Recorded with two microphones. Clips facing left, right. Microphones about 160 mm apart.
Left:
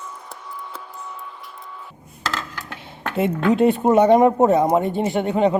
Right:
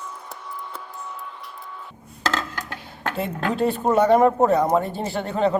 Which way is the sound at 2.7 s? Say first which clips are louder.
Left 4 dB; 20° left (ahead or behind).